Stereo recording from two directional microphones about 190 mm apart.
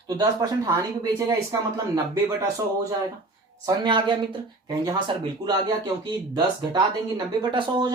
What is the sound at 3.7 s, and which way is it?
Speech, 25° right (ahead or behind).